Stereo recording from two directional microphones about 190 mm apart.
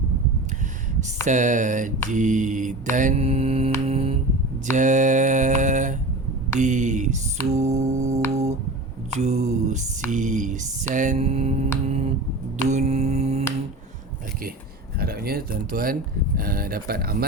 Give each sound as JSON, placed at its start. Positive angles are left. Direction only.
{"t": 0.9, "sound": "mantra", "side_deg": -40}
{"t": 8.3, "sound": "humming", "side_deg": -35}
{"t": 9.1, "sound": "mantra", "side_deg": -35}
{"t": 12.6, "sound": "a sound", "side_deg": -35}
{"t": 14.9, "sound": "speech", "side_deg": -55}